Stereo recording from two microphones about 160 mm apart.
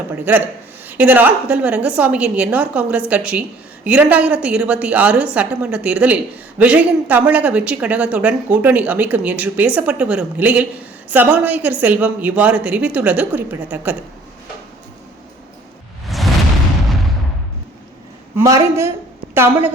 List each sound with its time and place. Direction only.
0.9 s speech: 10° right (ahead or behind)
16.0 s a sound: centre (ahead or behind)
18.3 s a woman's voice: 20° right (ahead or behind)